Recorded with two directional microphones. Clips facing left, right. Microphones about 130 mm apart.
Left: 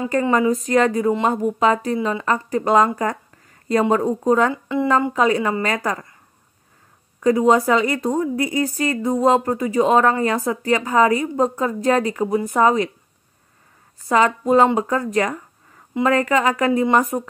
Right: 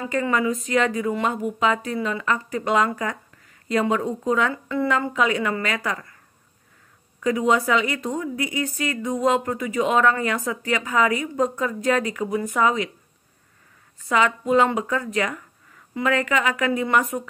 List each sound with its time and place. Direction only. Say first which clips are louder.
0.1 s a woman's voice: left 4 dB; 35° left (ahead or behind)
3.9 s a woman's voice: left 5 dB; 40° left (ahead or behind)
4.5 s speech: left 3 dB; 20° left (ahead or behind)
5.1 s a woman's voice: left 4 dB; 35° left (ahead or behind)
7.2 s a woman's voice: left 5 dB; 35° left (ahead or behind)
14.0 s a woman's voice: left 4 dB; 40° left (ahead or behind)